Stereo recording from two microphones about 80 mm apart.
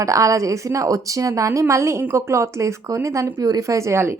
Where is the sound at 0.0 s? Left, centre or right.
Right.